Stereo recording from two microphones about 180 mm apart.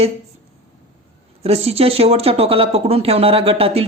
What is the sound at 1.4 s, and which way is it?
Speech, 35° right (ahead or behind).